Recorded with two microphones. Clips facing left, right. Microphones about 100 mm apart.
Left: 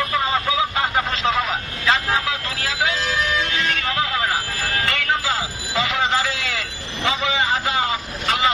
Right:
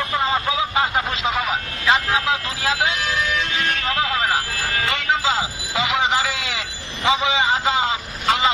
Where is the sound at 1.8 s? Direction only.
15° right (ahead or behind).